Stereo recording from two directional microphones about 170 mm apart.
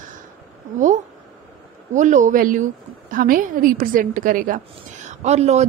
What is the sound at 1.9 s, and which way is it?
A woman's voice, 45° right (ahead or behind).